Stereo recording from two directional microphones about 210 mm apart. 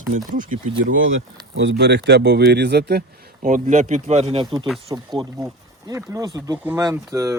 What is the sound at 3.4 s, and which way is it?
Speech, 35° right (ahead or behind).